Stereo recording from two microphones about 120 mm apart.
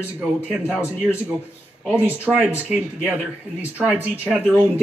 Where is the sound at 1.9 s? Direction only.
15° right (ahead or behind).